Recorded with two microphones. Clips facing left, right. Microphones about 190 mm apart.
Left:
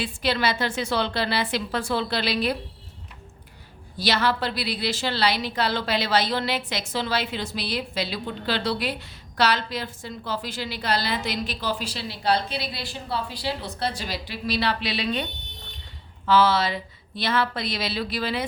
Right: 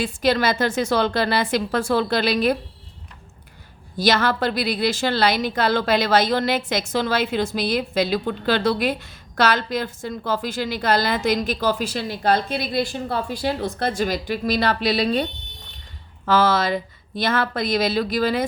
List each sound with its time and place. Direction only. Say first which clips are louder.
0.0 s a woman's voice: right 5 dB; 45° right (ahead or behind)
3.9 s a woman's voice: right 4 dB; 50° right (ahead or behind)